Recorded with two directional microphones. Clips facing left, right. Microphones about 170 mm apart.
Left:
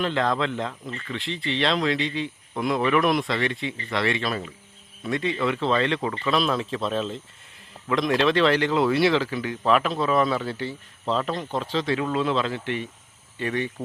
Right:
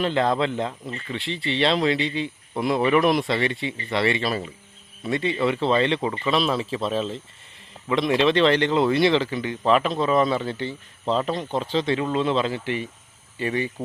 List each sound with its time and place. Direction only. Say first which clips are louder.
0.0 s speech: right 2 dB; centre (ahead or behind)
0.7 s speech: right 1 dB; 25° right (ahead or behind)
1.1 s speech: right 1 dB; centre (ahead or behind)